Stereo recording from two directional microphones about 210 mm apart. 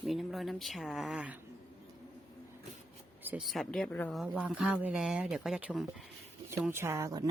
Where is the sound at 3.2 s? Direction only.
5° right (ahead or behind).